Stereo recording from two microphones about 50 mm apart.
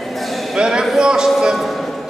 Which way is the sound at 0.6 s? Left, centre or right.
Centre.